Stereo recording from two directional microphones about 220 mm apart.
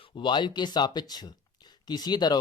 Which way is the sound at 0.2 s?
20° left (ahead or behind).